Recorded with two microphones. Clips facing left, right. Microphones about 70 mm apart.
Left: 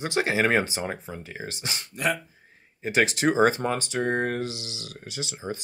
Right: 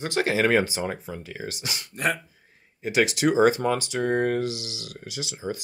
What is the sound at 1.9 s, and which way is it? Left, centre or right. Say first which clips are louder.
Speech: even; right.